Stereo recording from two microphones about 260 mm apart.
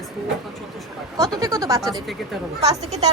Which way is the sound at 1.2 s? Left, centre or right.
Centre.